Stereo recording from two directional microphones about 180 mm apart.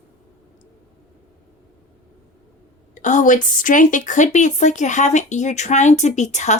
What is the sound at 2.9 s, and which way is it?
A woman's voice, 45° left (ahead or behind).